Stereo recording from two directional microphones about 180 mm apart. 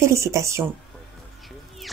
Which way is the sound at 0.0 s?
15° right (ahead or behind).